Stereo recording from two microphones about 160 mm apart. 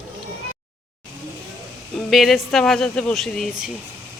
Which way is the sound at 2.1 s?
Centre (ahead or behind).